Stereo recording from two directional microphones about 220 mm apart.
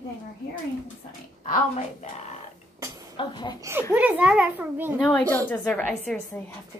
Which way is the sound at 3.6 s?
10° right (ahead or behind).